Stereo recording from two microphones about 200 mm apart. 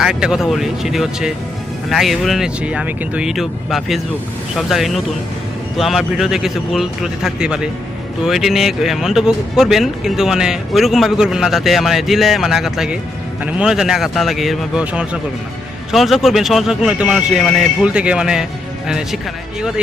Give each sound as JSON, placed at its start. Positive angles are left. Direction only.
{"t": 0.0, "sound": "speech", "side_deg": -5}